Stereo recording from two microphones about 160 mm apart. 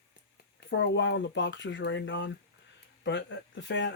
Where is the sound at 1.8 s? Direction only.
90° left.